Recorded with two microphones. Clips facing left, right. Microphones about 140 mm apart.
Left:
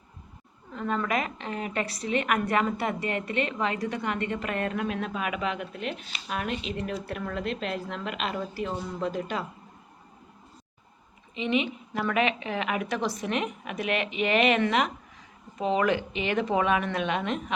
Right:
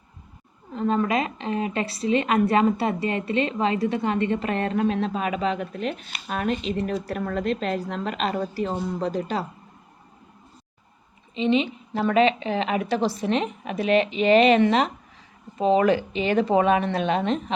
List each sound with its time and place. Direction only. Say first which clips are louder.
0.7 s a woman's voice: right 5 dB; 20° right (ahead or behind)
11.3 s a woman's voice: right 5 dB; 30° right (ahead or behind)